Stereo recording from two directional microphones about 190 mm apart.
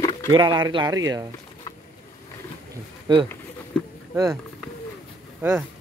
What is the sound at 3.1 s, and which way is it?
Speech, 25° right (ahead or behind).